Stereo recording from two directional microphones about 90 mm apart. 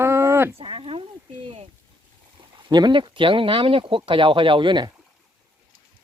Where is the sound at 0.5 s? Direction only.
90° right.